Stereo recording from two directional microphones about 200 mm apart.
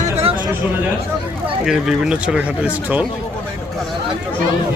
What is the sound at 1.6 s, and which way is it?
Speech, centre (ahead or behind).